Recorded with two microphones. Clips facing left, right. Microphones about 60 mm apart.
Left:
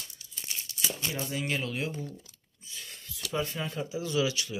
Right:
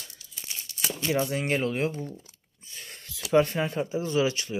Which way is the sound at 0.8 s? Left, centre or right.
Right.